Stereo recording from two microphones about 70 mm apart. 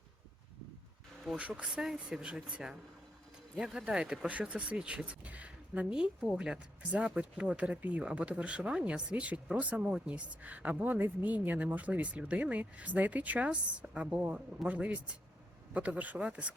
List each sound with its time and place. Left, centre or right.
1.4 s a woman's voice: centre